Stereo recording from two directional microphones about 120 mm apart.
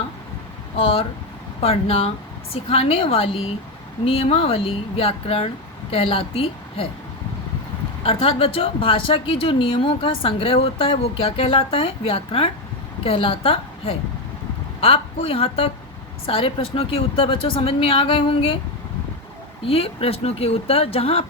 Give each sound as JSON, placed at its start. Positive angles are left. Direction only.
{"t": 0.8, "sound": "speech", "side_deg": 50}
{"t": 8.0, "sound": "speech", "side_deg": 55}
{"t": 19.6, "sound": "speech", "side_deg": 55}